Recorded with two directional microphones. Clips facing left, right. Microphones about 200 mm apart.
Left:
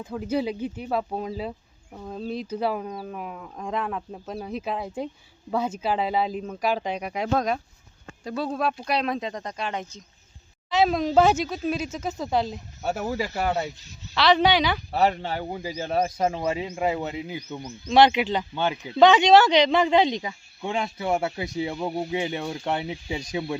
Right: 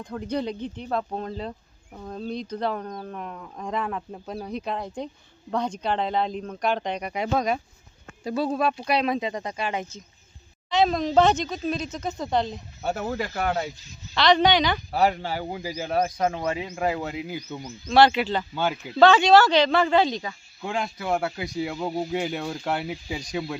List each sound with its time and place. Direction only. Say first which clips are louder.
0.0 s speech: left 2 dB; 5° left (ahead or behind)
17.8 s speech: even; 20° left (ahead or behind)
18.5 s speech: right 1 dB; 5° right (ahead or behind)
18.9 s speech: even; 20° left (ahead or behind)
20.7 s speech: left 1 dB; centre (ahead or behind)
21.2 s speech: left 1 dB; 25° left (ahead or behind)
21.6 s speech: even; 5° left (ahead or behind)